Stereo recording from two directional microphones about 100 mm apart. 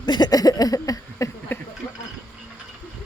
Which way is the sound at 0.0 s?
45° left (ahead or behind).